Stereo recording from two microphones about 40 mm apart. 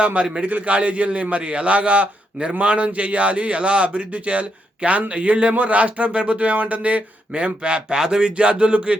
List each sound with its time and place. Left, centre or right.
0.4 s a man's voice: right